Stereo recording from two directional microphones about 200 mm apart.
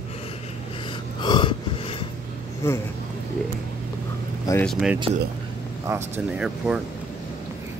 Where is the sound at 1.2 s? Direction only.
20° left (ahead or behind).